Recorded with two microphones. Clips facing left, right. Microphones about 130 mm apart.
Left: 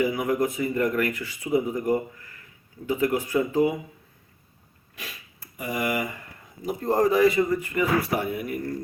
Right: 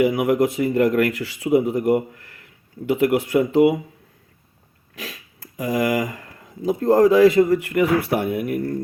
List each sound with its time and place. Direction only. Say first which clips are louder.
0.0 s speech: right 6 dB; 70° right (ahead or behind)
4.9 s speech: right 6 dB; 90° right; by 8.6 s 65° right (ahead or behind)